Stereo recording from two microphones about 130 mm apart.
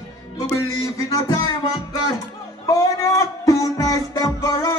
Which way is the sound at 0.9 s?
25° left (ahead or behind).